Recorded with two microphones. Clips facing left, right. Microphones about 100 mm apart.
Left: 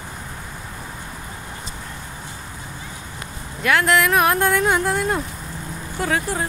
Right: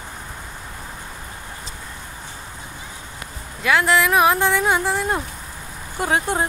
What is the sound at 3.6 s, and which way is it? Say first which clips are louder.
Speech: even; 5° right (ahead or behind).